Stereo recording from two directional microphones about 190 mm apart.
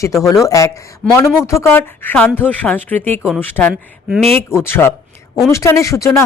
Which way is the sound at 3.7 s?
5° right (ahead or behind).